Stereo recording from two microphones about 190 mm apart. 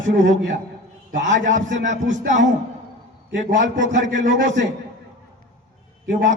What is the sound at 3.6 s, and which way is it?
A man's voice, 70° right (ahead or behind).